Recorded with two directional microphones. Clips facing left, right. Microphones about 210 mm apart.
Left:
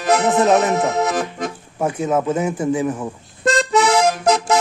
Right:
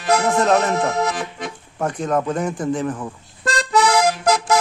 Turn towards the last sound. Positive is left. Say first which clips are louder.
# left 1 dB
turn(degrees=20)  # may be behind; listen again after turning